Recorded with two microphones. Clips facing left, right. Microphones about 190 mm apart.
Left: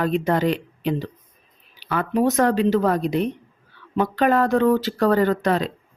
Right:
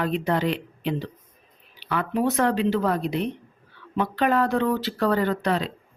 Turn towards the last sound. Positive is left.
turn(degrees=45)  # may be behind; listen again after turning